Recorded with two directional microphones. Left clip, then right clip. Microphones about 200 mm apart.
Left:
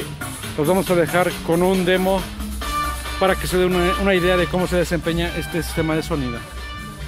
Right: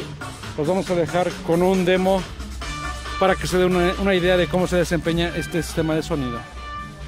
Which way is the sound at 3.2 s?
20° right (ahead or behind).